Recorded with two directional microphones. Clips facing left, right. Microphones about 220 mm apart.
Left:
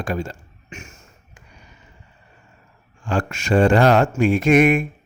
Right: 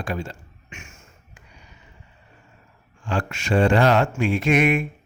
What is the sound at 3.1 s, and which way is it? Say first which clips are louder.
A man's voice: left 3 dB; 45° left (ahead or behind).